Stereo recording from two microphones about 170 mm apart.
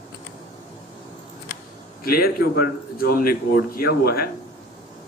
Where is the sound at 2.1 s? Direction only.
60° left (ahead or behind).